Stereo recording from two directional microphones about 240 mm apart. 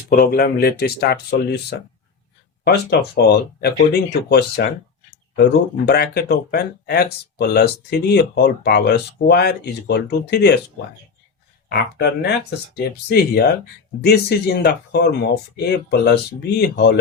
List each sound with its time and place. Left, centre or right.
0.1 s speech: left
2.6 s speech: left
11.9 s speech: left